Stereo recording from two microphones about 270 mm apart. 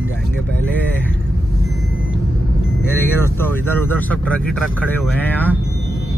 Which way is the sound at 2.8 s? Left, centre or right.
Centre.